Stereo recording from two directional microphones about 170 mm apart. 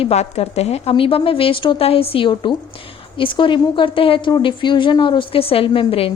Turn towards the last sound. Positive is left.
turn(degrees=35)  # may be behind; listen again after turning